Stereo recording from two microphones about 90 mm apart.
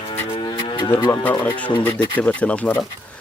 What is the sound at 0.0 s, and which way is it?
Music, 90° left.